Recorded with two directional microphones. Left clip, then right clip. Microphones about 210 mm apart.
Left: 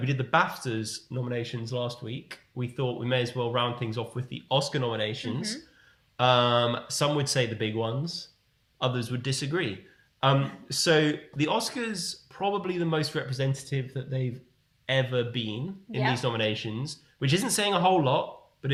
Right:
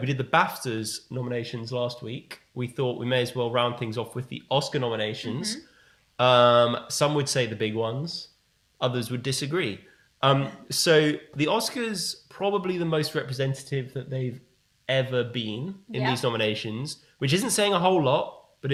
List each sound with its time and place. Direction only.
0.0 s speech: 30° right (ahead or behind)